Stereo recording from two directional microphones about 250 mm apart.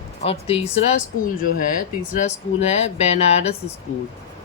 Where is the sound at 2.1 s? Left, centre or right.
Left.